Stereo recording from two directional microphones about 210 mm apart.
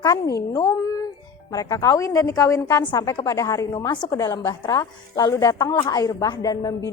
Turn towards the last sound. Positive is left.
turn(degrees=15)  # may be behind; listen again after turning